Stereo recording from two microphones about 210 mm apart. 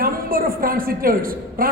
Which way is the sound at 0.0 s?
45° right (ahead or behind).